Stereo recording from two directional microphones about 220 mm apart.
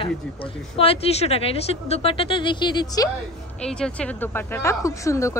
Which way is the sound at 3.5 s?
5° left (ahead or behind).